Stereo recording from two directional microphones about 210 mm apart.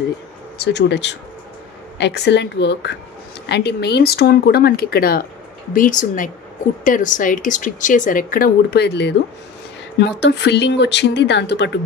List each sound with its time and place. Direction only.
0.7 s a woman's voice: 55° left (ahead or behind)